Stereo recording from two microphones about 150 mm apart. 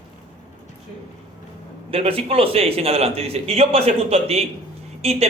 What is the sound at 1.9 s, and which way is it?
A man's voice, 40° right (ahead or behind).